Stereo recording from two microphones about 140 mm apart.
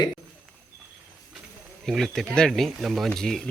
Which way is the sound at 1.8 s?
Centre (ahead or behind).